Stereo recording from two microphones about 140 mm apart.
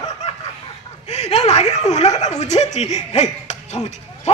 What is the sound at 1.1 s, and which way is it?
Speech, 50° left (ahead or behind).